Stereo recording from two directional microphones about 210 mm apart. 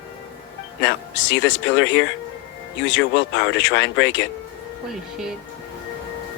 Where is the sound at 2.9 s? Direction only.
60° left (ahead or behind).